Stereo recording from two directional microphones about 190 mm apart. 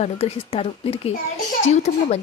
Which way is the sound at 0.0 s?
35° left (ahead or behind).